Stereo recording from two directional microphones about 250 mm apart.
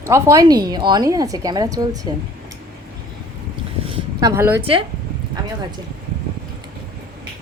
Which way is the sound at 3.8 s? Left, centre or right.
Centre.